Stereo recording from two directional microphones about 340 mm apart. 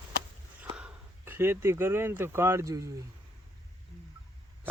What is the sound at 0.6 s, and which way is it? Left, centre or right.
Speech, centre.